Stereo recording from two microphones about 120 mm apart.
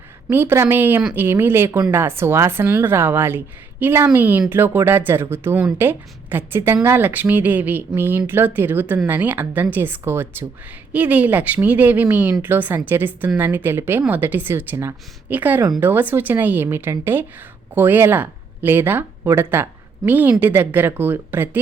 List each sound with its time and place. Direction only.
0.3 s a woman's voice: 15° right (ahead or behind)